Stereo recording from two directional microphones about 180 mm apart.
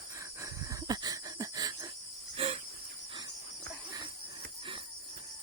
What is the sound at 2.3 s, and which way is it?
Cricket, 30° right (ahead or behind).